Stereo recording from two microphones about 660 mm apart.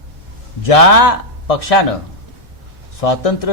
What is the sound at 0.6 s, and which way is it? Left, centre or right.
A man's voice, left.